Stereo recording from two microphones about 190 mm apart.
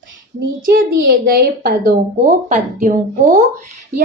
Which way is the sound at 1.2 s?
50° right (ahead or behind).